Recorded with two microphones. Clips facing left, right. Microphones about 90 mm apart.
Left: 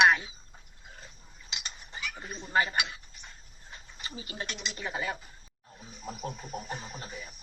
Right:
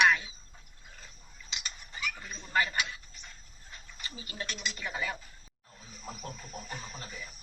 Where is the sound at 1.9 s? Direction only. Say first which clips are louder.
Right 1 dB; 30° left (ahead or behind).